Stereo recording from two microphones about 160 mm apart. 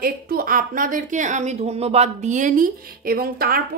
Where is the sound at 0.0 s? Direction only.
65° right (ahead or behind).